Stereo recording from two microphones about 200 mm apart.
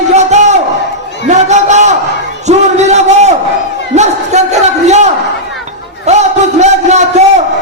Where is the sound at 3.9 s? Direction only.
35° right (ahead or behind).